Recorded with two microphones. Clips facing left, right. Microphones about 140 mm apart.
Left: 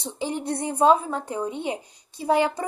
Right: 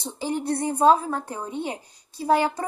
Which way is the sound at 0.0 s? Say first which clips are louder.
Right 1 dB; 20° left (ahead or behind).